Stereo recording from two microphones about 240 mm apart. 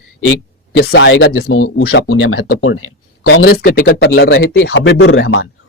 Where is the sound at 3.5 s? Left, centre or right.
Left.